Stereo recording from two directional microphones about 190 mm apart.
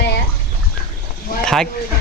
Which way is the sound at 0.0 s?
60° left (ahead or behind).